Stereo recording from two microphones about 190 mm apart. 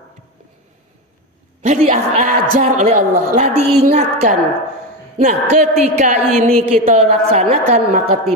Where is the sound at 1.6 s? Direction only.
40° right (ahead or behind).